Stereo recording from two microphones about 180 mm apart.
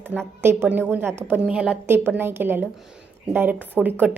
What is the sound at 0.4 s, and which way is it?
A woman's voice, 10° right (ahead or behind).